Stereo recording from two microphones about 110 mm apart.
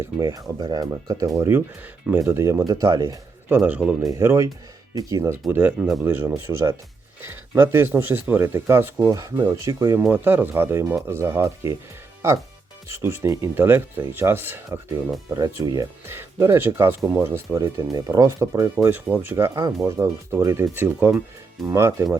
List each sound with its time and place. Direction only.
0.0 s speech: 30° right (ahead or behind)
1.4 s speech: 20° right (ahead or behind)
3.5 s speech: 15° right (ahead or behind)
4.1 s speech: 25° right (ahead or behind)
5.5 s speech: 15° right (ahead or behind)
9.0 s speech: 35° right (ahead or behind)
10.1 s speech: 15° right (ahead or behind)
12.9 s speech: 25° right (ahead or behind)
15.6 s speech: 35° right (ahead or behind)
16.0 s speech: 25° right (ahead or behind)
17.9 s speech: 35° right (ahead or behind)
19.6 s speech: 35° right (ahead or behind)
20.3 s speech: 25° right (ahead or behind)